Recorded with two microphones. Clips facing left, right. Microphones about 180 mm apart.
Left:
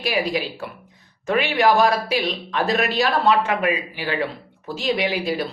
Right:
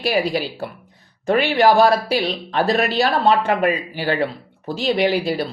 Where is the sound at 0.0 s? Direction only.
35° right (ahead or behind).